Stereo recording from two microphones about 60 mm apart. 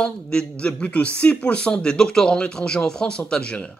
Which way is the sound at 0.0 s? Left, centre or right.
Centre.